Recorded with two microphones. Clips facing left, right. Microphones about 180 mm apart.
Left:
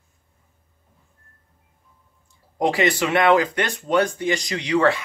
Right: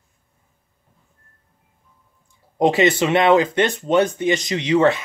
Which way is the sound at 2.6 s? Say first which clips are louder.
Right 4 dB; 25° right (ahead or behind).